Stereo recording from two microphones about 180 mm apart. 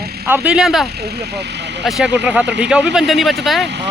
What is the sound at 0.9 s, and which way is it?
Speech, 65° right (ahead or behind).